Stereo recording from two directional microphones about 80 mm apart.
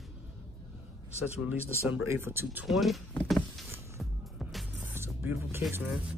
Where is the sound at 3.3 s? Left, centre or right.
Centre.